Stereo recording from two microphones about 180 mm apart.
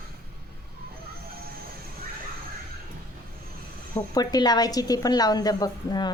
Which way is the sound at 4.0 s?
20° left (ahead or behind).